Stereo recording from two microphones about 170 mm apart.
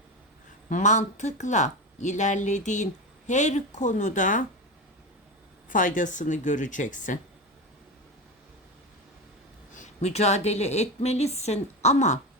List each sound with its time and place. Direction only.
0.7 s speech: 45° left (ahead or behind)
5.6 s speech: 50° left (ahead or behind)
9.7 s a woman's voice: 40° left (ahead or behind)